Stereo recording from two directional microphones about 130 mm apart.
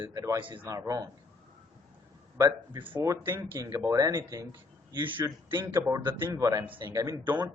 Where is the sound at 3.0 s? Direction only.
25° right (ahead or behind).